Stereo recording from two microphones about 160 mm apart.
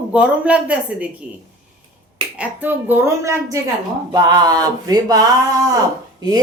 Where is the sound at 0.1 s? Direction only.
10° right (ahead or behind).